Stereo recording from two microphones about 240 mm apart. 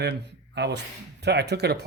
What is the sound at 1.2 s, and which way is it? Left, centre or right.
Speech, right.